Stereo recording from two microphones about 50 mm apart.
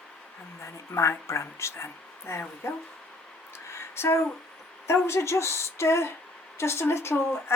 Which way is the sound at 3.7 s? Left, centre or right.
Left.